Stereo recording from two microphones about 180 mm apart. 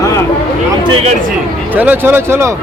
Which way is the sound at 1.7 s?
10° right (ahead or behind).